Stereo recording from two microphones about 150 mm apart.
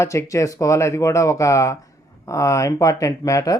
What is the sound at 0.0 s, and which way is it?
Speech, 20° left (ahead or behind).